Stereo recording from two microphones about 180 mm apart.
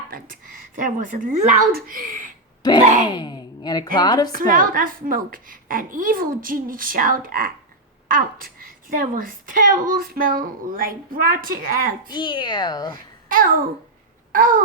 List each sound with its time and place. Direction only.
0.1 s a woman's voice: 50° right (ahead or behind)
2.6 s speech: 20° left (ahead or behind)
4.3 s a woman's voice: 50° right (ahead or behind)
12.0 s speech: 25° left (ahead or behind)
13.2 s babbling: 50° right (ahead or behind)
14.3 s a woman's voice: 50° right (ahead or behind)